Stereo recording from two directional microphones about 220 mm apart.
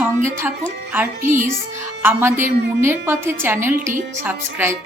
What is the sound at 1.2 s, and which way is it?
Speech, 35° right (ahead or behind).